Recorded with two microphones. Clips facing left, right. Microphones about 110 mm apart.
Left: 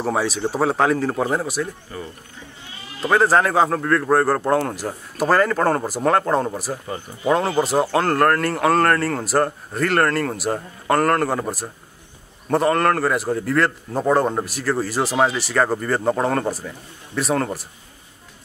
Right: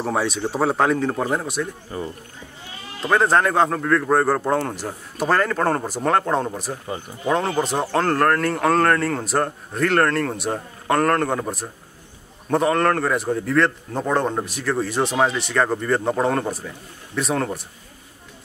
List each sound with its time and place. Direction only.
0.0 s a man's voice: centre (ahead or behind)
1.9 s speech: 25° right (ahead or behind)
3.0 s a man's voice: 5° left (ahead or behind)